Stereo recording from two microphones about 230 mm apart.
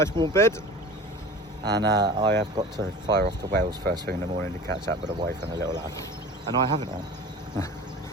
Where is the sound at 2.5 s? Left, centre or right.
Centre.